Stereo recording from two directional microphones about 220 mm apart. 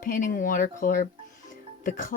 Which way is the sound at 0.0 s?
35° left (ahead or behind).